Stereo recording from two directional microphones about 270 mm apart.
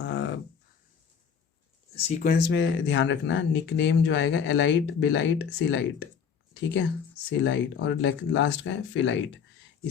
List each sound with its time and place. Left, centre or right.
0.0 s a sound: left
2.0 s speech: left
2.3 s speech: left
7.3 s speech: left